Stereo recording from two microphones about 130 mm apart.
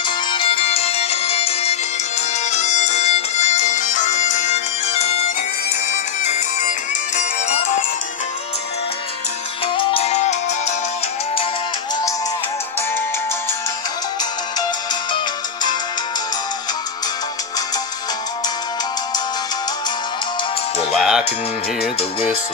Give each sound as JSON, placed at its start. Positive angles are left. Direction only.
{"t": 0.0, "sound": "music", "side_deg": 40}
{"t": 5.9, "sound": "music", "side_deg": 65}
{"t": 9.7, "sound": "music", "side_deg": 40}
{"t": 20.9, "sound": "music", "side_deg": -5}